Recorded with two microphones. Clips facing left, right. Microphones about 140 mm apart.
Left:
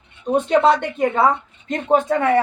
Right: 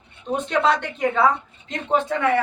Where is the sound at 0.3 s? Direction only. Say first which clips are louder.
Left 6 dB; 40° left (ahead or behind).